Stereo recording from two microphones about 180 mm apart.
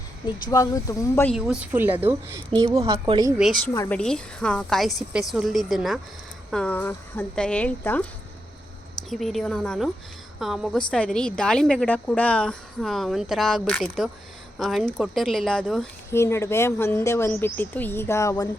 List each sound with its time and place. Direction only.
0.5 s speech: 20° left (ahead or behind)
1.4 s a woman's voice: 5° right (ahead or behind)
2.7 s speech: 30° right (ahead or behind)
3.3 s a woman's voice: centre (ahead or behind)
9.0 s a woman's voice: centre (ahead or behind)
16.0 s speech: 15° left (ahead or behind)